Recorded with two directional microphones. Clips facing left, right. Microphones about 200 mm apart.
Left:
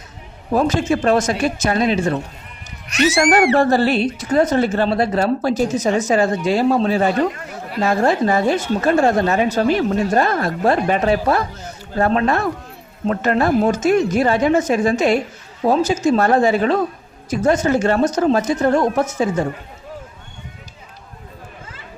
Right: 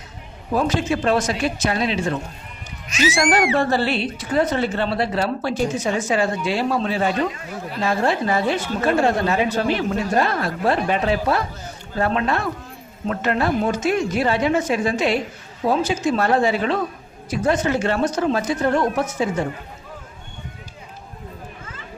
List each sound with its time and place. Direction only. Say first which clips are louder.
0.5 s a woman's voice: left 4 dB; 45° left (ahead or behind)
2.8 s speech: left 4 dB; 65° left (ahead or behind)
3.6 s a woman's voice: left 5 dB; 45° left (ahead or behind)